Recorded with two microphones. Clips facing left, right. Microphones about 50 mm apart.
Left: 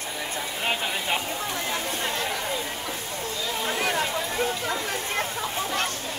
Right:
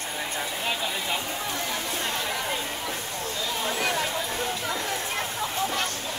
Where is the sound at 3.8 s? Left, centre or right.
Left.